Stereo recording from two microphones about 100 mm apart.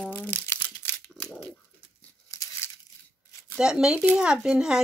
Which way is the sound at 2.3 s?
35° left (ahead or behind).